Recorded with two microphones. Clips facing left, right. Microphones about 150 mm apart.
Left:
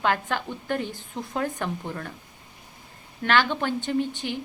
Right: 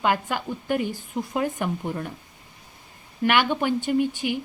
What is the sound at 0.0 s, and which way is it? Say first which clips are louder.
A woman's voice: right 1 dB; 10° right (ahead or behind).